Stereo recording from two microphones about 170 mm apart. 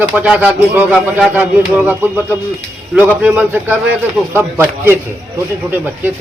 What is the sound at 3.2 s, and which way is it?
A man's voice, 10° right (ahead or behind).